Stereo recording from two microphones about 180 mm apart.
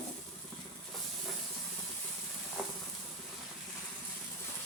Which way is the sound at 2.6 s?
Centre (ahead or behind).